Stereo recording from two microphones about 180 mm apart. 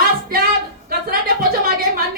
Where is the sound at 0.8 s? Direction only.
55° right (ahead or behind).